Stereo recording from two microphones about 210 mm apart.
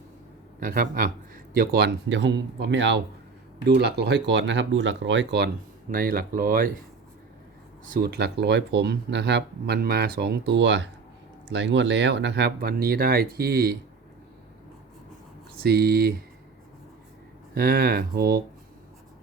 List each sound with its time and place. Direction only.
0.6 s speech: 45° right (ahead or behind)
5.9 s speech: 45° right (ahead or behind)
7.9 s speech: 45° right (ahead or behind)
15.6 s speech: 50° right (ahead or behind)
17.5 s speech: 45° right (ahead or behind)